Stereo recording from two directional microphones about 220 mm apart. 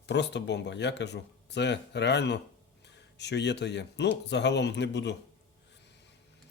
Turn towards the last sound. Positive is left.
turn(degrees=50)  # may be behind; listen again after turning